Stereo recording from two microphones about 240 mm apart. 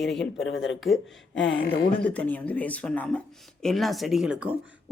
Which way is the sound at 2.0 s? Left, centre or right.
Centre.